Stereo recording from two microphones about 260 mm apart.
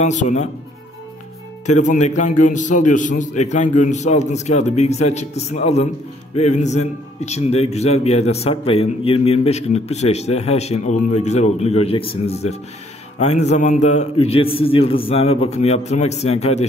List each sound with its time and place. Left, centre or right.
0.0 s a man's voice: left
1.7 s a man's voice: left